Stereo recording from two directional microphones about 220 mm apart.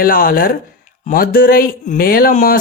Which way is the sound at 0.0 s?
40° left (ahead or behind).